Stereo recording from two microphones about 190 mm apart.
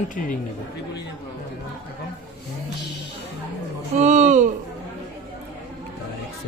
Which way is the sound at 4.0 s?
35° right (ahead or behind).